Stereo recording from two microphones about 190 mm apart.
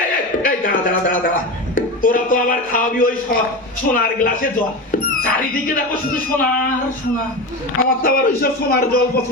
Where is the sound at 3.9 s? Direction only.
50° left (ahead or behind).